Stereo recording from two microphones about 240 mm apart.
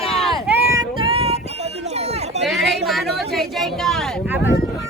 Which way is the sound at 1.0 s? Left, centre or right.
Right.